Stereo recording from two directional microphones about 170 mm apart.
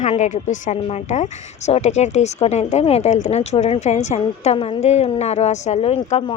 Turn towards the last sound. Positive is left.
turn(degrees=40)  # may be behind; listen again after turning